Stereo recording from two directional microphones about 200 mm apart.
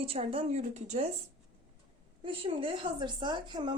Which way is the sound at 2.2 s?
25° right (ahead or behind).